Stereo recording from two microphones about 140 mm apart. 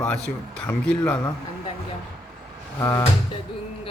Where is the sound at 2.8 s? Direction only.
20° left (ahead or behind).